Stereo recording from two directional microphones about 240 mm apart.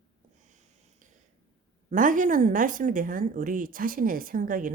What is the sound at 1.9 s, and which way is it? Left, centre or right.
Speech, right.